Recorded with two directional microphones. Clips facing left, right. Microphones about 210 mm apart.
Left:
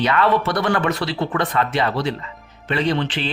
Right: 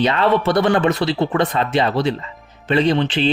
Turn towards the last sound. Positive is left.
turn(degrees=-25)  # may be behind; listen again after turning